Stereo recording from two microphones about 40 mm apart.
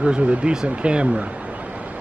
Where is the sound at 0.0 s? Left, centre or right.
Right.